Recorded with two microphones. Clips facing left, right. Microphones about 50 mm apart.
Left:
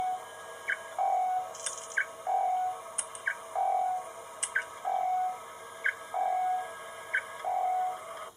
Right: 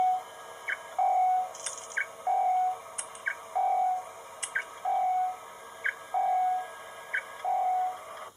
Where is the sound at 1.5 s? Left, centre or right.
Centre.